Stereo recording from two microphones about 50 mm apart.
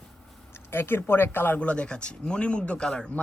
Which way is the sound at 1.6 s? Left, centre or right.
Left.